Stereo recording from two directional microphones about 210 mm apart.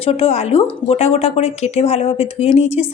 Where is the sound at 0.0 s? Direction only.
30° left (ahead or behind).